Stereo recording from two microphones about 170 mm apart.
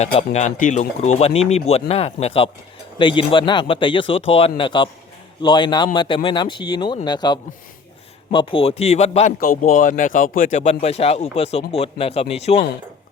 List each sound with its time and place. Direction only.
0.0 s speech: 40° left (ahead or behind)
9.4 s speech: 50° left (ahead or behind)